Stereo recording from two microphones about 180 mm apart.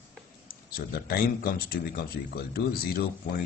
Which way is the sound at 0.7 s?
55° left (ahead or behind).